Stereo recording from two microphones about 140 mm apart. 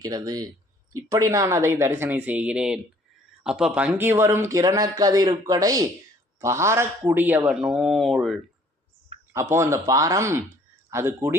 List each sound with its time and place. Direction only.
0.0 s a man's voice: 25° right (ahead or behind); by 8.4 s centre (ahead or behind)
9.3 s speech: 20° right (ahead or behind)